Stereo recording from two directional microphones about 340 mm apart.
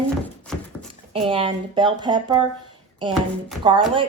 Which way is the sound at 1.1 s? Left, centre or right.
Centre.